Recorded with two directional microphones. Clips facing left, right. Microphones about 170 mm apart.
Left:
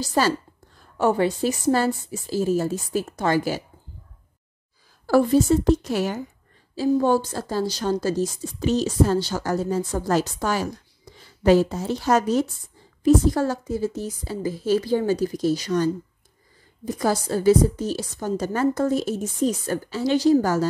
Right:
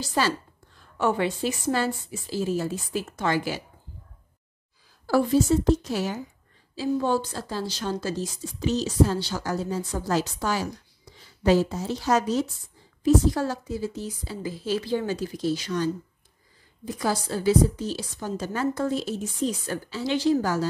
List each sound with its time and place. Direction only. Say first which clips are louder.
0.0 s a woman's voice: left 4 dB; 40° left (ahead or behind)
5.0 s a woman's voice: left 4 dB; 50° left (ahead or behind)